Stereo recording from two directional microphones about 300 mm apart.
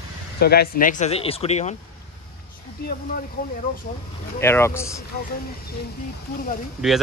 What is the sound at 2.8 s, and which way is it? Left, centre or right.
Speech, left.